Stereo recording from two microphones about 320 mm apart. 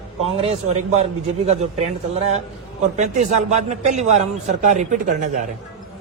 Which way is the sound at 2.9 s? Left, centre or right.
Right.